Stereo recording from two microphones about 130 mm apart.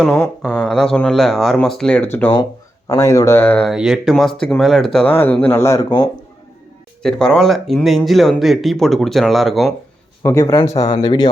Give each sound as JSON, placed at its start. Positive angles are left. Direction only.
{"t": 0.2, "sound": "speech", "side_deg": 5}
{"t": 2.3, "sound": "speech", "side_deg": 25}
{"t": 3.7, "sound": "speech", "side_deg": -5}
{"t": 5.0, "sound": "speech", "side_deg": 15}
{"t": 7.0, "sound": "speech", "side_deg": 5}
{"t": 10.2, "sound": "speech", "side_deg": 25}